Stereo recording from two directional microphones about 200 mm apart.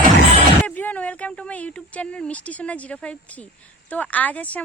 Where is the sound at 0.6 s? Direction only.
10° left (ahead or behind).